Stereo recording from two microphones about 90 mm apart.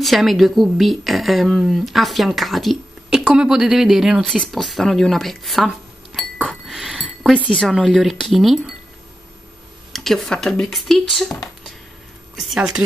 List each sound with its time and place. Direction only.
0.0 s speech: centre (ahead or behind)
6.6 s a sound: 5° right (ahead or behind)
7.7 s speech: centre (ahead or behind)
9.9 s speech: 5° left (ahead or behind)
12.4 s speech: 5° right (ahead or behind)